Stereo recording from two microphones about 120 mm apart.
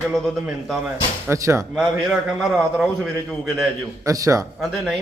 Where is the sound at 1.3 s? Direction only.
25° right (ahead or behind).